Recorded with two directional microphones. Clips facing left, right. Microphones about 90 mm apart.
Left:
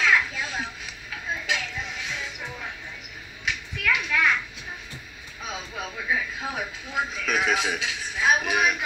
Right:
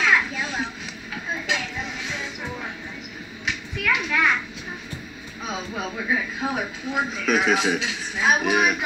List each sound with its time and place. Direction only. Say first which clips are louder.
0.0 s music: right 1 dB; 30° right (ahead or behind)
3.8 s children playing: right 2 dB; 30° right (ahead or behind)
5.4 s a sound: right 4 dB; 35° right (ahead or behind)
6.4 s a man's voice: right 5 dB; 40° right (ahead or behind)